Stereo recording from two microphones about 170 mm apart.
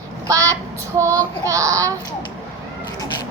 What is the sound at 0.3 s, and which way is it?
Child singing, 20° right (ahead or behind).